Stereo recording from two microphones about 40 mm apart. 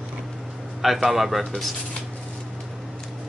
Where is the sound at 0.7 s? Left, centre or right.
Centre.